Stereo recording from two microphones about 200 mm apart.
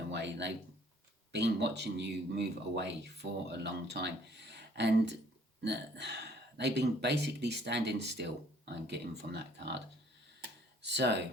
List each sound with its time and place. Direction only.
0.1 s a sound: 60° right (ahead or behind)
1.3 s speech: 60° right (ahead or behind)
10.8 s speech: 60° right (ahead or behind)